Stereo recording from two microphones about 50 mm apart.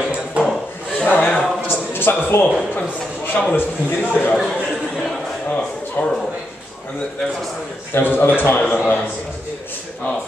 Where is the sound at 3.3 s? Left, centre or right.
Left.